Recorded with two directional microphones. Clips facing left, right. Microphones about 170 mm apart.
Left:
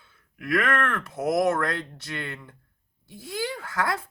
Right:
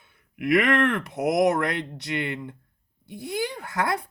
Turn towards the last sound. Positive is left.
turn(degrees=-20)  # may be behind; listen again after turning